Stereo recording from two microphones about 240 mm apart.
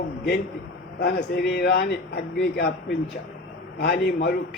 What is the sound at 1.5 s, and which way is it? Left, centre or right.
A man's voice, left.